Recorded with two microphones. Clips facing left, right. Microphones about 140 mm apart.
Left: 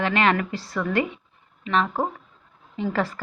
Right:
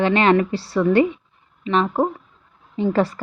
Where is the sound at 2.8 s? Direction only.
35° right (ahead or behind).